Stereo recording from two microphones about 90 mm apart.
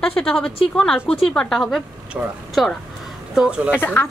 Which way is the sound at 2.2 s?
15° right (ahead or behind).